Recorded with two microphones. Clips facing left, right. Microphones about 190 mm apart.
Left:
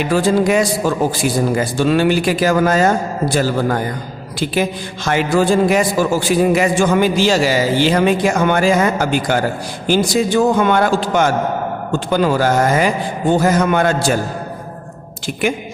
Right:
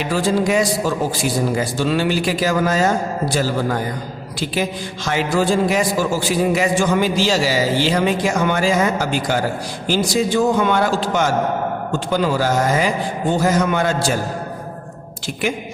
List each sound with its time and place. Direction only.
0.0 s a man's voice: 55° left (ahead or behind)
5.0 s a man's voice: 55° left (ahead or behind)